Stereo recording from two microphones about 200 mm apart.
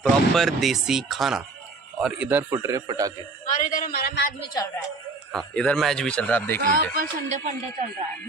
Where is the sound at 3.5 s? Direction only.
40° left (ahead or behind).